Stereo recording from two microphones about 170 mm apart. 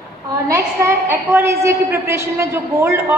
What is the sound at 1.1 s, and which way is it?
A woman's voice, 15° right (ahead or behind).